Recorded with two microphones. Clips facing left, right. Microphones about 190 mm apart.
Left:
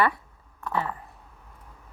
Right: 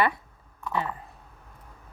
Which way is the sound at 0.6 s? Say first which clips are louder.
Left 1 dB; 15° right (ahead or behind).